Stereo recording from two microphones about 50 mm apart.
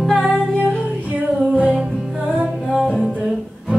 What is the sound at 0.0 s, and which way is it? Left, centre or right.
Music, centre.